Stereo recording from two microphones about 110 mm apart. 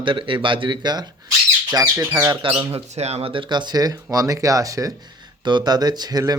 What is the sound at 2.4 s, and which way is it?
Speech, 50° right (ahead or behind).